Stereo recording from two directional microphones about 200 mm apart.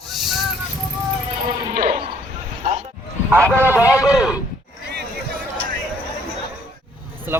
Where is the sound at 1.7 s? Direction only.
30° right (ahead or behind).